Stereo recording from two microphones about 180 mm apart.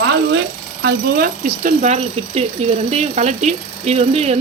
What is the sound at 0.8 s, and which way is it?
Speech, 60° right (ahead or behind).